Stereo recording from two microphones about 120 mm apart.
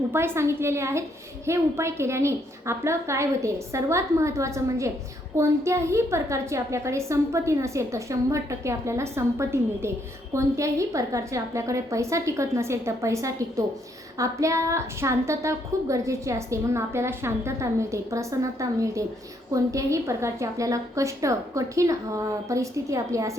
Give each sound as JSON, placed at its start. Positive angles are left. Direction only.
{"t": 0.1, "sound": "a woman's voice", "side_deg": -20}